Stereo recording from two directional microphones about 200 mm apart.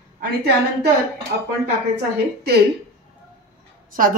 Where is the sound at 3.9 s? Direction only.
45° right (ahead or behind).